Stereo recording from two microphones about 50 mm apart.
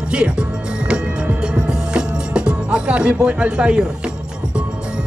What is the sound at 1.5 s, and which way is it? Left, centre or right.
Music, centre.